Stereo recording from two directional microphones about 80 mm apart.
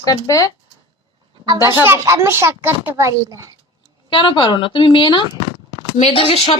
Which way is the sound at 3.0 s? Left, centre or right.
Right.